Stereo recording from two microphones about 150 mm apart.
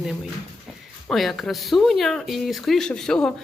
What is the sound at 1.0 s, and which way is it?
Speech, centre (ahead or behind).